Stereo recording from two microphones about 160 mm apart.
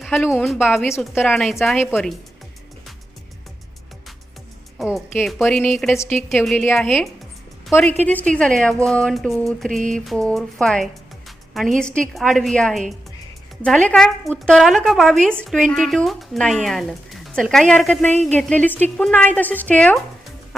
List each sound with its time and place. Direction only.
0.1 s speech: 10° left (ahead or behind)
0.4 s a woman's voice: centre (ahead or behind)
0.8 s speech: 15° left (ahead or behind)
4.8 s a woman's voice: centre (ahead or behind)
7.7 s a woman's voice: 15° left (ahead or behind)
11.3 s music: centre (ahead or behind)
11.9 s a woman's voice: 5° left (ahead or behind)